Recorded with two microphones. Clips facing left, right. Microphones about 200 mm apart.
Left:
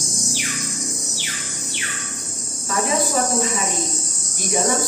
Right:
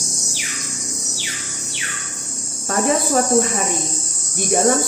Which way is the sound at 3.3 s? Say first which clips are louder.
Right 4 dB; 55° right (ahead or behind).